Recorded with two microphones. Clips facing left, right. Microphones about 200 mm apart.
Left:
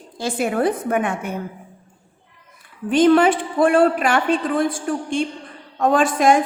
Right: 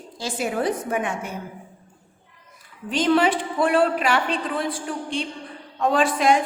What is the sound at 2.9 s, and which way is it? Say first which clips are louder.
A woman's voice: left 6 dB; 50° left (ahead or behind).